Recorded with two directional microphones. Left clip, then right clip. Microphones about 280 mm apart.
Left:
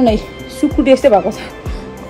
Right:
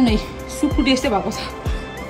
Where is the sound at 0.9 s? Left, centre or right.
Centre.